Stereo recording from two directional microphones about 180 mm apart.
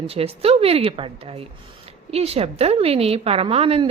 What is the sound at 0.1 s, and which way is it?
A woman's voice, 35° right (ahead or behind).